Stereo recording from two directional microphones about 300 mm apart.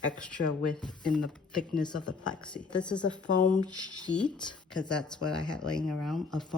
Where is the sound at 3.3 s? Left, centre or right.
Left.